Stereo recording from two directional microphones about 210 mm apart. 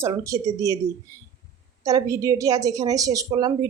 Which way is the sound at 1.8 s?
15° right (ahead or behind).